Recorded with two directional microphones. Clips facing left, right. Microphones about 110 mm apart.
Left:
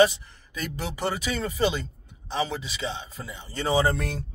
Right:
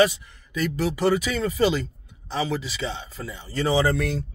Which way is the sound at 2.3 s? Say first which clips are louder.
Right 2 dB; 20° left (ahead or behind).